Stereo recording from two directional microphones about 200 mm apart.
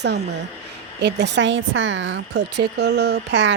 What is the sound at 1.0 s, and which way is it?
Speech, 60° right (ahead or behind).